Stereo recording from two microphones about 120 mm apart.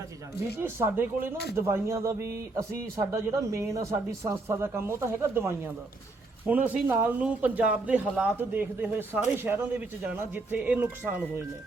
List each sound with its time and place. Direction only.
0.6 s a man's voice: 20° right (ahead or behind)